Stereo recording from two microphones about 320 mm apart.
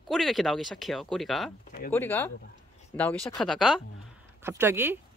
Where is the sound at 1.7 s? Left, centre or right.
Left.